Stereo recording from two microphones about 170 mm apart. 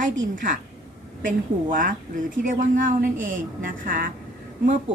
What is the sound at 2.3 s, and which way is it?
A woman's voice, 50° right (ahead or behind).